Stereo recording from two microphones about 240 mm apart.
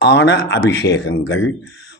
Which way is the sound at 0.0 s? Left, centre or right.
Left.